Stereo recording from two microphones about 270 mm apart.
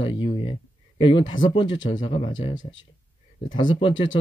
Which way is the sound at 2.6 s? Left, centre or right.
Left.